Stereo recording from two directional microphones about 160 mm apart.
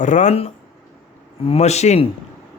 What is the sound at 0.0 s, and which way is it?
Speech, 50° left (ahead or behind).